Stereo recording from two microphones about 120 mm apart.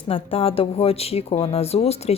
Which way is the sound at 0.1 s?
50° left (ahead or behind).